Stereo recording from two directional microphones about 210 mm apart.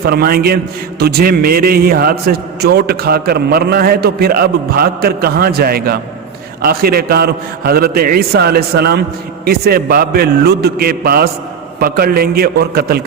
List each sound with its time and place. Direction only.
0.0 s a man's voice: 50° right (ahead or behind)